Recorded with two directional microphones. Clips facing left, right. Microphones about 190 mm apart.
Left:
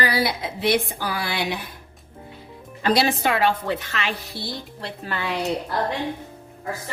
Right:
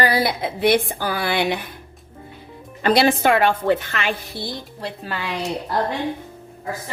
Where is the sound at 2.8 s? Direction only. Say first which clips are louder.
Right 4 dB; 55° right (ahead or behind).